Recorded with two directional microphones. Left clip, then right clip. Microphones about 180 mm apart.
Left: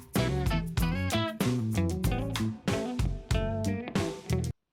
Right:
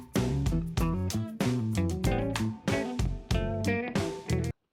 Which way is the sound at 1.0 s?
20° left (ahead or behind).